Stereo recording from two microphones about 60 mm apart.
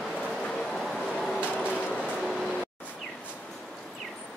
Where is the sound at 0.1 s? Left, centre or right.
Centre.